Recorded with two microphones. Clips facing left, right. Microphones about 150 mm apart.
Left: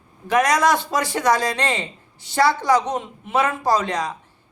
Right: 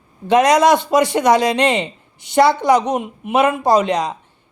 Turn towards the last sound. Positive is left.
turn(degrees=-20)  # may be behind; listen again after turning